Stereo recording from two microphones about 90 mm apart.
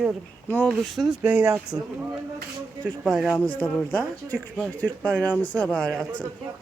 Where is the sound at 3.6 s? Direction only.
20° left (ahead or behind).